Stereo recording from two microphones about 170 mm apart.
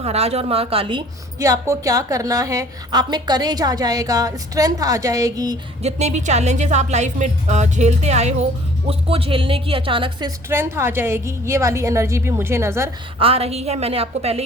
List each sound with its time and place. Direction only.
0.0 s a woman's voice: 40° right (ahead or behind); by 5.5 s 20° right (ahead or behind)
5.8 s a woman's voice: 40° right (ahead or behind); by 12.9 s 15° right (ahead or behind)
13.1 s a woman's voice: 35° right (ahead or behind)